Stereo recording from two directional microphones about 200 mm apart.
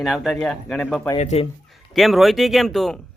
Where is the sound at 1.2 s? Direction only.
35° left (ahead or behind).